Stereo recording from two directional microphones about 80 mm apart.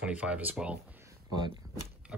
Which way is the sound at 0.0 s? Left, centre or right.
Centre.